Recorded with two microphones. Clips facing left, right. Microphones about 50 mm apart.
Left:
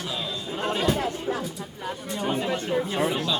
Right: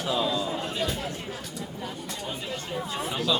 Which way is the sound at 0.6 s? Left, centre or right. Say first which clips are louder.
Left 4 dB; left.